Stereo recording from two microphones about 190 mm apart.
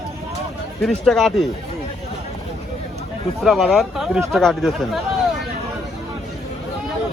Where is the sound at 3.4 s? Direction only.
Centre (ahead or behind).